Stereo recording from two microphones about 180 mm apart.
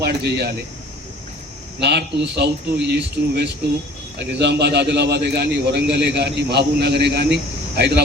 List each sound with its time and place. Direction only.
0.0 s speech: 65° right (ahead or behind)
1.8 s a man's voice: 70° right (ahead or behind)